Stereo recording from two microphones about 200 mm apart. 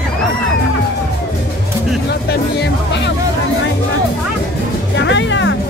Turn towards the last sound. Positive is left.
turn(degrees=65)  # may be behind; listen again after turning